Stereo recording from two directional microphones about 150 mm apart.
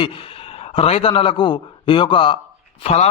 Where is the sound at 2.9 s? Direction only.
45° left (ahead or behind).